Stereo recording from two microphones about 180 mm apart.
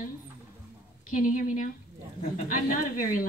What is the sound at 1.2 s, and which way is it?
Speech, 45° left (ahead or behind).